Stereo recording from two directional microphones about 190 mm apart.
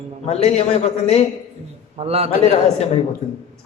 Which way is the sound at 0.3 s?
35° left (ahead or behind).